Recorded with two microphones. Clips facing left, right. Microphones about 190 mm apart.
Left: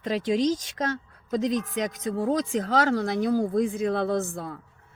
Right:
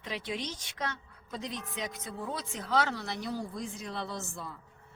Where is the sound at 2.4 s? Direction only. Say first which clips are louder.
Left 14 dB; 90° left.